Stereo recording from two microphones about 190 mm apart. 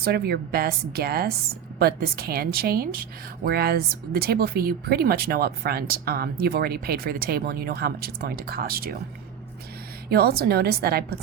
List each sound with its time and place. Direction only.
0.0 s a woman's voice: 55° right (ahead or behind)
10.1 s a woman's voice: 55° right (ahead or behind)